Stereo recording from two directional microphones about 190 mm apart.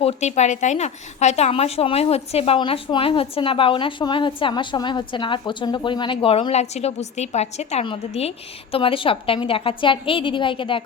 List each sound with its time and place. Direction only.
0.0 s a woman's voice: 35° left (ahead or behind)